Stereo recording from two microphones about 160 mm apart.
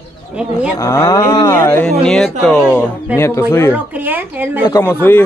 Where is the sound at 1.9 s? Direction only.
5° left (ahead or behind).